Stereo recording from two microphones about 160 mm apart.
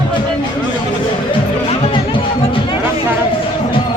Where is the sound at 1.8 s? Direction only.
30° left (ahead or behind).